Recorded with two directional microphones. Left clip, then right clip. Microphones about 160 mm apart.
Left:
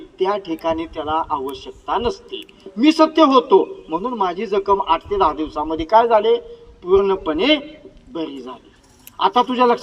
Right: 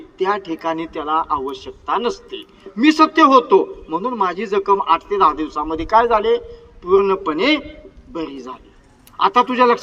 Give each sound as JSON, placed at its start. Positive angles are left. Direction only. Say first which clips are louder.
{"t": 0.2, "sound": "a man's voice", "louder": "even", "side_deg": 45}